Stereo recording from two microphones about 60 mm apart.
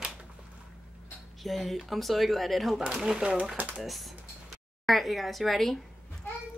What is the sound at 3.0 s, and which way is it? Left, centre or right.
Speech, centre.